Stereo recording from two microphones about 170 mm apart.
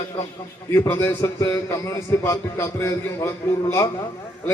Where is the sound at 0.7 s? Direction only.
15° left (ahead or behind).